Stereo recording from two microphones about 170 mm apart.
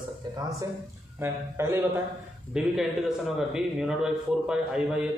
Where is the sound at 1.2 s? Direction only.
15° right (ahead or behind).